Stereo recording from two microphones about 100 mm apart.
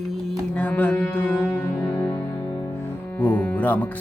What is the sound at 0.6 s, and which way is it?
Music, 15° left (ahead or behind).